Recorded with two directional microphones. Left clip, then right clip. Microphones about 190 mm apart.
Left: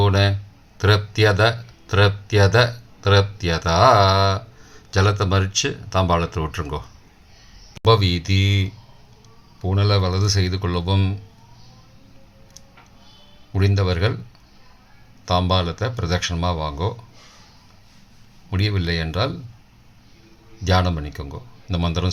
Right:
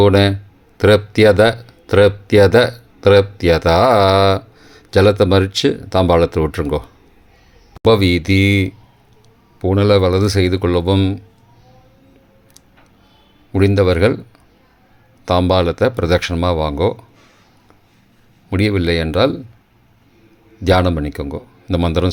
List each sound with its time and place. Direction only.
0.0 s speech: 40° right (ahead or behind)
13.5 s speech: 40° right (ahead or behind)
15.2 s speech: 40° right (ahead or behind)
18.5 s speech: 40° right (ahead or behind)
20.7 s speech: 45° right (ahead or behind)